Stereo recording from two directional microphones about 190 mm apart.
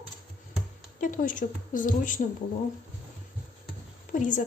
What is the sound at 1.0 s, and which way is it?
Speech, 45° left (ahead or behind).